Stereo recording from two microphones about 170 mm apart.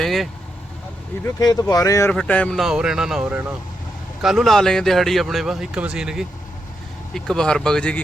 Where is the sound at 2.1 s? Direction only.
10° left (ahead or behind).